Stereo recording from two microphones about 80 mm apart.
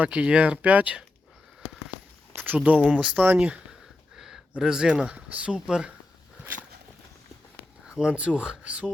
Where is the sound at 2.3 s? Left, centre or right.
Right.